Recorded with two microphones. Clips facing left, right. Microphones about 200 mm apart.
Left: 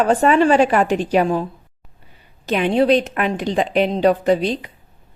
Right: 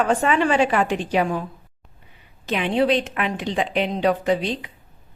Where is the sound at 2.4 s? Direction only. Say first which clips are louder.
Left 4 dB; 40° left (ahead or behind).